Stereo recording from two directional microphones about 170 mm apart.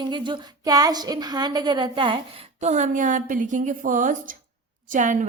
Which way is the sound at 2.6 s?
45° right (ahead or behind).